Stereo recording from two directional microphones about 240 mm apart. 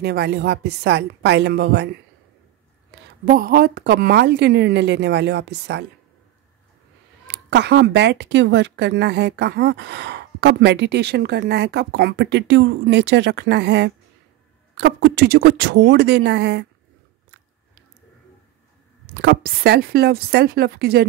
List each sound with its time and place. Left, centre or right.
0.0 s a woman's voice: right
2.9 s a woman's voice: right
7.2 s a woman's voice: right
19.0 s a woman's voice: right